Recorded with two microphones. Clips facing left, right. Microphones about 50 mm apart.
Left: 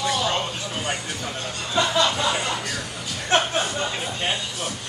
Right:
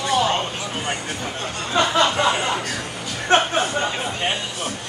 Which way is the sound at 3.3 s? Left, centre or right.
Right.